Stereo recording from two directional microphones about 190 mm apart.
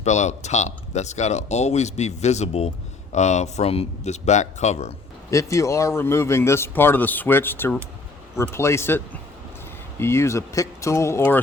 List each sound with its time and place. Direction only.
0.0 s speech: 35° left (ahead or behind)
5.3 s speech: 15° left (ahead or behind)
10.0 s speech: 15° left (ahead or behind)